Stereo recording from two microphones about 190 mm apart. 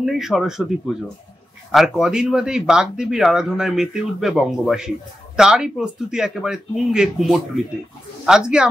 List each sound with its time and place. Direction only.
0.0 s speech: centre (ahead or behind)